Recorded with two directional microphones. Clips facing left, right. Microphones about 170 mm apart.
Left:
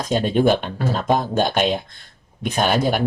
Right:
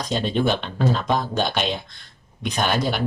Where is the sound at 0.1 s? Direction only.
50° left (ahead or behind).